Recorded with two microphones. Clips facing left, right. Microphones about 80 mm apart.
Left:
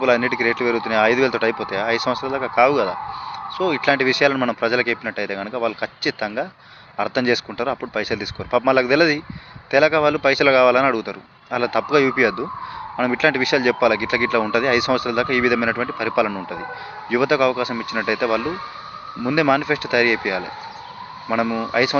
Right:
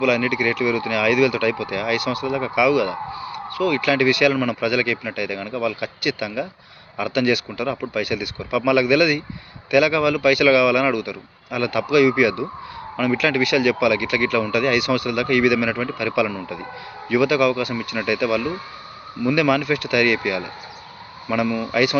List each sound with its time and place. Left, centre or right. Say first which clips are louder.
0.0 s speech: left 2 dB; left
17.7 s speech: left 1 dB; left